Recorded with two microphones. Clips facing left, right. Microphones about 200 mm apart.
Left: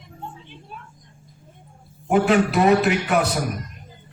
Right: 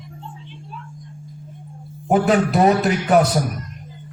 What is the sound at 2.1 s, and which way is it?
A man's voice, 40° right (ahead or behind).